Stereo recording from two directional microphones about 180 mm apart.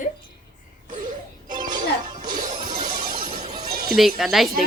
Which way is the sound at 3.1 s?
50° right (ahead or behind).